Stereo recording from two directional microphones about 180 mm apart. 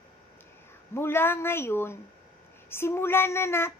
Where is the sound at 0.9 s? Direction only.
10° left (ahead or behind).